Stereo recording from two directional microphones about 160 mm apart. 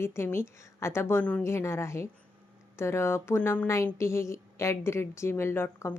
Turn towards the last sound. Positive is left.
turn(degrees=15)  # may be behind; listen again after turning